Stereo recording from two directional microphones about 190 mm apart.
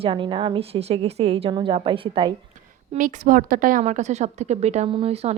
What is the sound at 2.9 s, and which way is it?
Speech, 45° right (ahead or behind).